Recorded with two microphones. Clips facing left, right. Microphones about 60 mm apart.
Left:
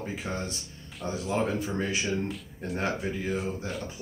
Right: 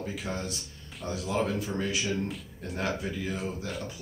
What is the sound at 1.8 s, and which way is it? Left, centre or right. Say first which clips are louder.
Speech: left 1 dB; left.